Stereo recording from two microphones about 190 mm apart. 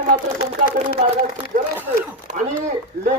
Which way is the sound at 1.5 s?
45° right (ahead or behind).